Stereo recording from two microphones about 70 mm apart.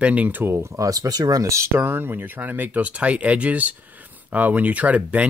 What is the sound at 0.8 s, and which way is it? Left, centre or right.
Speech, right.